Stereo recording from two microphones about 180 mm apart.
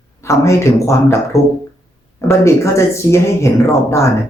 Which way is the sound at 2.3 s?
15° left (ahead or behind).